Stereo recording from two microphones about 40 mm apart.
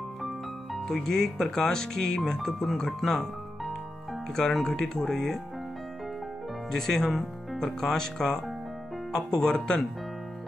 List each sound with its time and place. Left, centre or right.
0.8 s speech: centre
6.7 s speech: centre